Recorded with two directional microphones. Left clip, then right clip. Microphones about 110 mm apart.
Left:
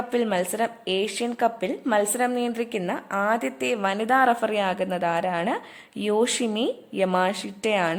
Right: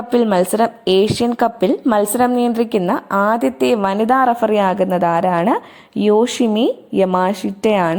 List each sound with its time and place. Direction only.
0.1 s a woman's voice: 30° right (ahead or behind)
3.4 s a woman's voice: 30° right (ahead or behind)